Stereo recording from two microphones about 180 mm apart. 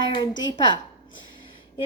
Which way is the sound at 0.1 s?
25° left (ahead or behind).